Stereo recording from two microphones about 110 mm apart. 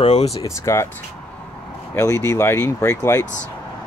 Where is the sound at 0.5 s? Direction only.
25° left (ahead or behind).